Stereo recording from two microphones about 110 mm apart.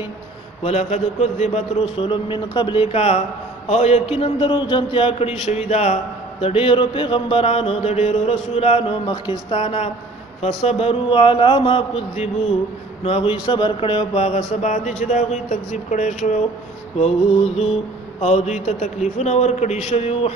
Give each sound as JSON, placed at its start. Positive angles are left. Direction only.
{"t": 0.7, "sound": "a man's voice", "side_deg": 75}
{"t": 3.6, "sound": "mantra", "side_deg": 75}
{"t": 6.4, "sound": "mantra", "side_deg": 55}
{"t": 13.0, "sound": "speech", "side_deg": 60}
{"t": 14.6, "sound": "a man's voice", "side_deg": 90}
{"t": 18.2, "sound": "a man's voice", "side_deg": 90}